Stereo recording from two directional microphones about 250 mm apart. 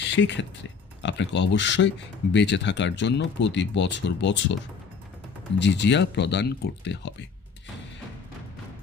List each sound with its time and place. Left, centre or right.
0.1 s speech: left
5.5 s speech: left